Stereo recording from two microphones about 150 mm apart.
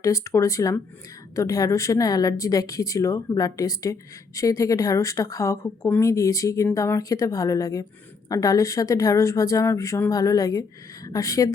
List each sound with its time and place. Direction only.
0.0 s a woman's voice: 20° left (ahead or behind)